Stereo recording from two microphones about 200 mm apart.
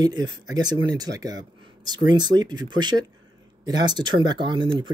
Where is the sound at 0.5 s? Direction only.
20° right (ahead or behind).